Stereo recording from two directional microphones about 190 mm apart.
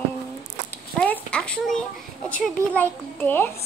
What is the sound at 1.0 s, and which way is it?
A woman's voice, 5° left (ahead or behind).